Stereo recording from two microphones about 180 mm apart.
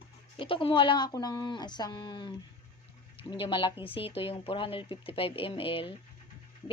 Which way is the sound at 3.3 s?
30° left (ahead or behind).